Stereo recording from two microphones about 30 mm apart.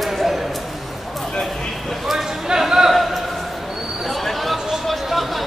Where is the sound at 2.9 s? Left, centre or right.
Centre.